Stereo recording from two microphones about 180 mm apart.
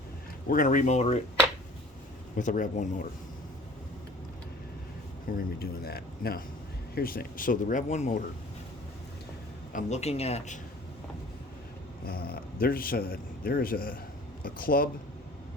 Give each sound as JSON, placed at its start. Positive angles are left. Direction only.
{"t": 0.4, "sound": "speech", "side_deg": 50}
{"t": 2.3, "sound": "speech", "side_deg": 45}
{"t": 5.4, "sound": "speech", "side_deg": 60}
{"t": 9.7, "sound": "speech", "side_deg": 40}
{"t": 12.0, "sound": "speech", "side_deg": 55}